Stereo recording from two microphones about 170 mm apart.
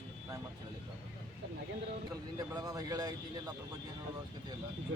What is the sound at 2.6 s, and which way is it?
Speech, 20° right (ahead or behind).